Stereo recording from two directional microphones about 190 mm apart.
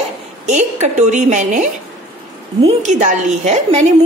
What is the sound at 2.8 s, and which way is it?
A woman's voice, 40° right (ahead or behind).